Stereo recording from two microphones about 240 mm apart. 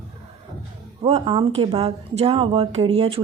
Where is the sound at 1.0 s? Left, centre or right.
Right.